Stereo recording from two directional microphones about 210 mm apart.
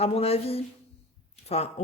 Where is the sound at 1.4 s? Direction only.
30° left (ahead or behind).